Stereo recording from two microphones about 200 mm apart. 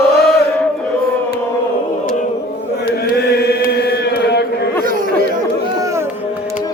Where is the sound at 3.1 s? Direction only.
55° left (ahead or behind).